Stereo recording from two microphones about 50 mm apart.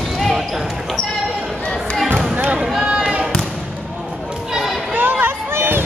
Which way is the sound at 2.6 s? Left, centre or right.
Centre.